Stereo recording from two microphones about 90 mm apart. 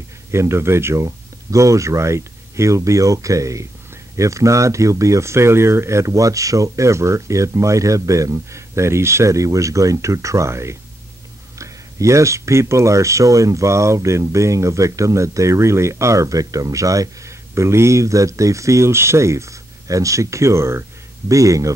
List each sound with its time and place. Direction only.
0.3 s speech: 30° right (ahead or behind)